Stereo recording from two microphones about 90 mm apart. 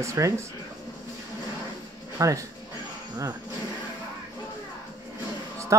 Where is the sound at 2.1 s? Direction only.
40° right (ahead or behind).